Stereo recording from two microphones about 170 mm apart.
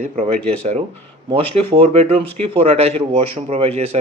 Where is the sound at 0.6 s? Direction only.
40° right (ahead or behind).